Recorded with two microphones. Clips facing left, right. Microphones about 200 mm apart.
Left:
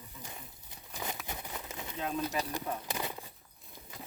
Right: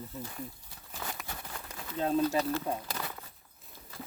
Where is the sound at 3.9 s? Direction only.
15° left (ahead or behind).